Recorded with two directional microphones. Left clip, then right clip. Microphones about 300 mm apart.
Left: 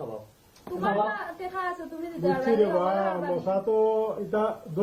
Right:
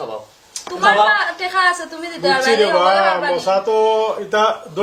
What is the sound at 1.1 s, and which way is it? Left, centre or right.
Speech, centre.